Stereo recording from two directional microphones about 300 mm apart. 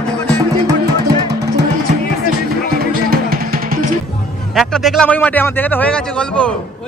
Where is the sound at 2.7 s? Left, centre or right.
Right.